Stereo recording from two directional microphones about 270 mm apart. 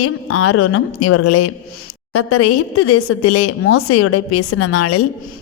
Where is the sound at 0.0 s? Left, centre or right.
Left.